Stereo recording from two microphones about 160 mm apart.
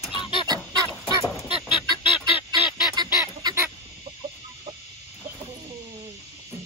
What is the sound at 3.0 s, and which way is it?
Goose, 25° right (ahead or behind).